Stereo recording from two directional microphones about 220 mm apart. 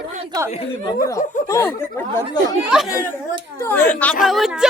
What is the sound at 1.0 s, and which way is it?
Speech, 15° left (ahead or behind).